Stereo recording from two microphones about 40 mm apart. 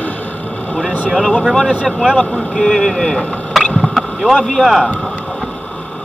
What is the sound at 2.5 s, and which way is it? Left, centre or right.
Speech, left.